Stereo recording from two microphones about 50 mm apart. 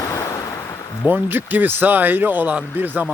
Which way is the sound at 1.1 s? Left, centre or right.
Right.